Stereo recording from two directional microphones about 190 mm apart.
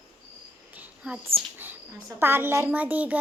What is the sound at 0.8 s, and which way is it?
Whispering, 5° right (ahead or behind).